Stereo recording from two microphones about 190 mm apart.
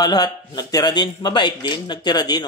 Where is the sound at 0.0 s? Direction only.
20° left (ahead or behind).